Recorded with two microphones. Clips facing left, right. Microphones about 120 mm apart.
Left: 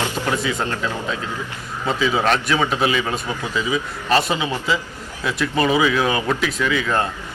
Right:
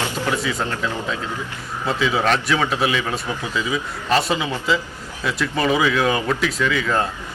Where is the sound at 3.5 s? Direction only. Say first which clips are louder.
Left 2 dB; 10° left (ahead or behind).